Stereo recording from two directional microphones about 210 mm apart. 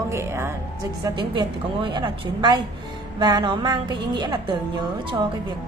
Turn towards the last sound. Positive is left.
turn(degrees=-20)  # may be behind; listen again after turning